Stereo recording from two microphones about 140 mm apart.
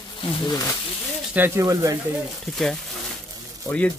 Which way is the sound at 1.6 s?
25° right (ahead or behind).